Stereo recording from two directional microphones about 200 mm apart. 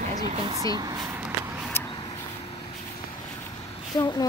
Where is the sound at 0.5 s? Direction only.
20° right (ahead or behind).